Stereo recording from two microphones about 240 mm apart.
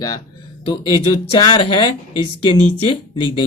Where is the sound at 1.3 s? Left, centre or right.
Left.